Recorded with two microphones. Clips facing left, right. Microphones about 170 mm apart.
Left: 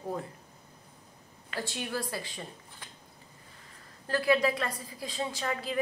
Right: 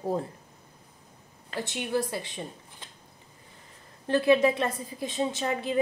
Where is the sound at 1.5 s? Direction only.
20° right (ahead or behind).